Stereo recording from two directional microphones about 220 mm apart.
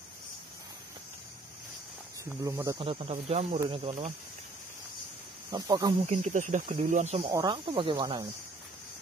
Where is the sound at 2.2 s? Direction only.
15° right (ahead or behind); by 4.1 s 30° right (ahead or behind).